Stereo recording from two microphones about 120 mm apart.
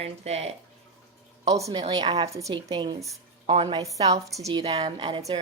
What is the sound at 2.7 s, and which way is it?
Speech, 40° right (ahead or behind).